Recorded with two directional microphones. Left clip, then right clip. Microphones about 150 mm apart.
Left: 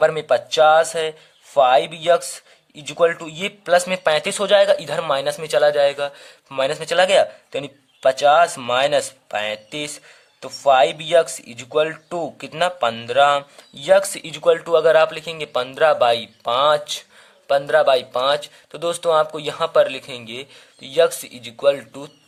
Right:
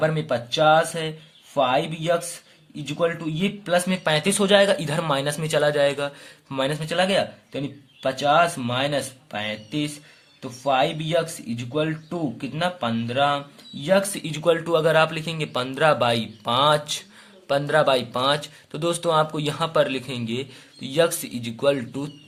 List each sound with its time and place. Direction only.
0.0 s speech: 40° left (ahead or behind)